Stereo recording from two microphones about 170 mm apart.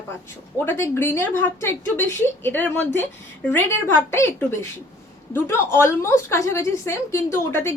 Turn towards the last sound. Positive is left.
turn(degrees=15)  # may be behind; listen again after turning